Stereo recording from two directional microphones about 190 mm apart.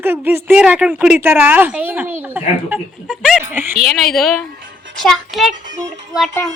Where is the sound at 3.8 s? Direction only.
5° left (ahead or behind).